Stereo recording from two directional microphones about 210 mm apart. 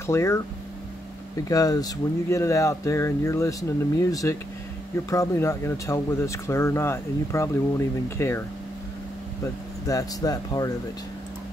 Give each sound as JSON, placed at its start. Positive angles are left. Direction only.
{"t": 0.0, "sound": "speech", "side_deg": 15}
{"t": 1.5, "sound": "speech", "side_deg": 15}
{"t": 9.8, "sound": "speech", "side_deg": 15}